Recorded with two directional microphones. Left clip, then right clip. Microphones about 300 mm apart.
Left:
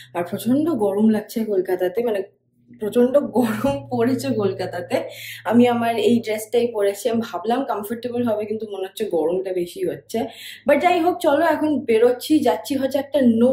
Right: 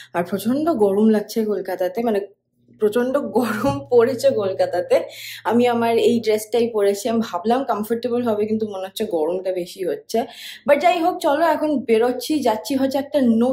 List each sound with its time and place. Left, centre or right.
0.1 s speech: centre